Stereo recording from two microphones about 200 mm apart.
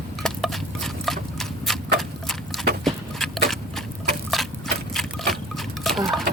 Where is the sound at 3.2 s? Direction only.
Centre (ahead or behind).